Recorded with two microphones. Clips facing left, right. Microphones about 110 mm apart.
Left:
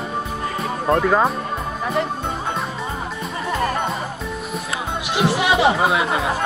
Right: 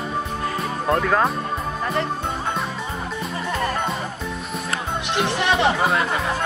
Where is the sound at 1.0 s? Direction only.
10° left (ahead or behind).